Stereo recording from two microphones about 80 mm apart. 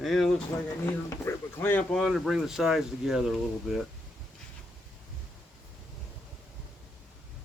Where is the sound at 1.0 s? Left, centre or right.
Left.